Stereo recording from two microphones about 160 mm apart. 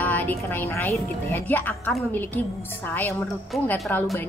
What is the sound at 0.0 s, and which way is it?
A woman's voice, 10° left (ahead or behind).